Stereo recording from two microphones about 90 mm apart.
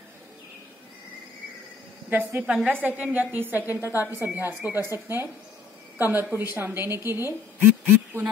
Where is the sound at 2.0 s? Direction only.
20° right (ahead or behind).